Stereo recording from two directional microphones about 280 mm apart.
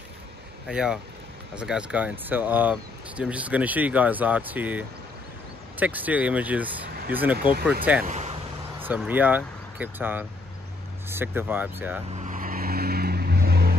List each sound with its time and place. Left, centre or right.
0.7 s speech: centre
8.1 s a sound: right
8.7 s speech: centre
12.2 s vehicle: right